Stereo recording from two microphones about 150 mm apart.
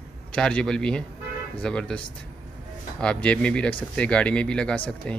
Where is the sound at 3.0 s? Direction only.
5° left (ahead or behind).